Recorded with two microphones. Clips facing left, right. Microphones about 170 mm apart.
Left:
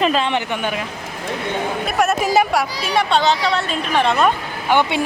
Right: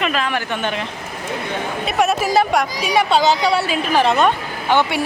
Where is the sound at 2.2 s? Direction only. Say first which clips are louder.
Even; 15° left (ahead or behind).